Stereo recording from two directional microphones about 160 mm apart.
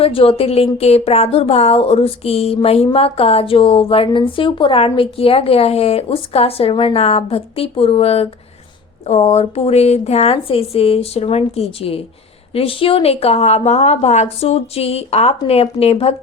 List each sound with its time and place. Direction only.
0.0 s speech: 35° left (ahead or behind)